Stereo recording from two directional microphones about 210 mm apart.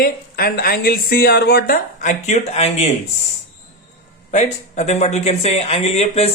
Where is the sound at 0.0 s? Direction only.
45° left (ahead or behind).